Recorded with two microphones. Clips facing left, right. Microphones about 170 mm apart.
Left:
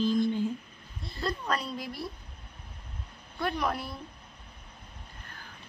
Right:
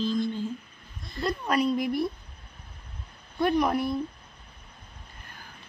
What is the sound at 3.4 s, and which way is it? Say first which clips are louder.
Speech: right 7 dB; 15° right (ahead or behind).